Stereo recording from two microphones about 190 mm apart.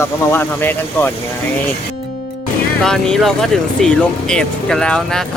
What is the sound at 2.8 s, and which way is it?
Speech, centre (ahead or behind).